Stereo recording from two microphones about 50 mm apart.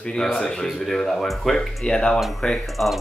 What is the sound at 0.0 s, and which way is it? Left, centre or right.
Speech, centre.